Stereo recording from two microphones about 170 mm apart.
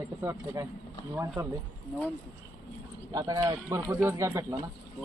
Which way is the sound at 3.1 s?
20° right (ahead or behind).